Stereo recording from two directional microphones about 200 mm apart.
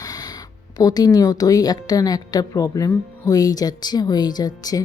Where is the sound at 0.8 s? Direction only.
20° left (ahead or behind).